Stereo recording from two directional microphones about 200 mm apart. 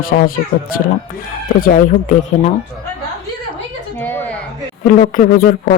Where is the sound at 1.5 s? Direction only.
45° left (ahead or behind).